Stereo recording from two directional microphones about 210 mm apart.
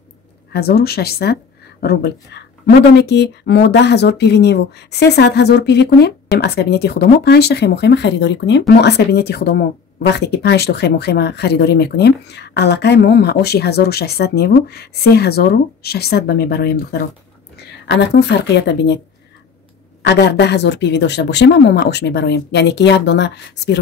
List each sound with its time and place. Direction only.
0.5 s a woman's voice: 50° left (ahead or behind)
20.0 s a woman's voice: 55° left (ahead or behind)